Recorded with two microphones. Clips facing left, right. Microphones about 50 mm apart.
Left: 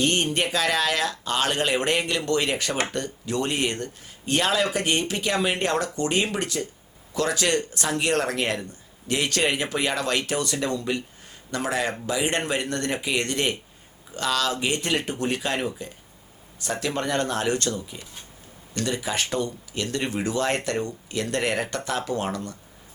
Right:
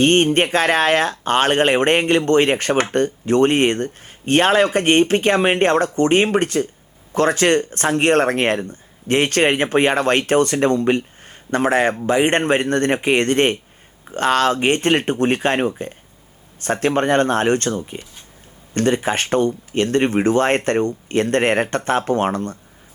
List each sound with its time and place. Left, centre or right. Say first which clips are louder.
0.0 s speech: right 9 dB; right